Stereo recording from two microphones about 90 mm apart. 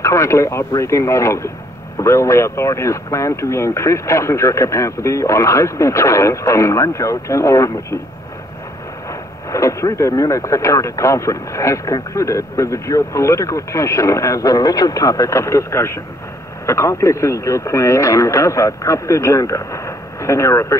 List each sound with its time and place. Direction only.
0.0 s speech: 35° left (ahead or behind)
9.5 s speech: 35° left (ahead or behind)